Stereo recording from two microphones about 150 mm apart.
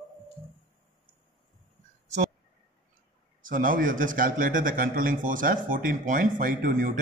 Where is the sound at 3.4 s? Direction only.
65° right (ahead or behind).